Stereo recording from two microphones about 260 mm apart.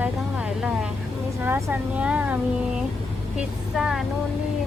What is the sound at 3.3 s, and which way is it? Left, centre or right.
Speech, centre.